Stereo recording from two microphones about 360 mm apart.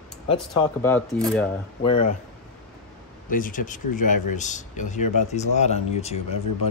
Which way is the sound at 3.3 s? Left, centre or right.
Left.